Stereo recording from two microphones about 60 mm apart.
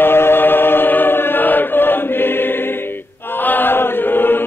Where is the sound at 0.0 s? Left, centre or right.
Left.